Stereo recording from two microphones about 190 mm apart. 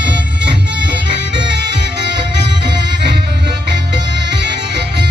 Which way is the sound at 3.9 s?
65° right (ahead or behind).